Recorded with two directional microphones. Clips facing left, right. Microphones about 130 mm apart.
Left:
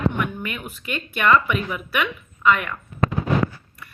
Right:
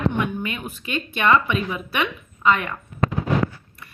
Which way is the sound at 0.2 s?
20° right (ahead or behind).